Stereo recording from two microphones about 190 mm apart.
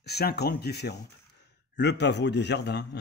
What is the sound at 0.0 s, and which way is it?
A man's voice, 55° left (ahead or behind).